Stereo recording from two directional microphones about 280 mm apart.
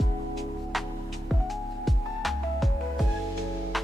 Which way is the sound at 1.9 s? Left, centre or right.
Centre.